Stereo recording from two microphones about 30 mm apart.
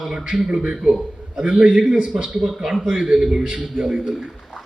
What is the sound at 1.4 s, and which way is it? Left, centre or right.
Speech, right.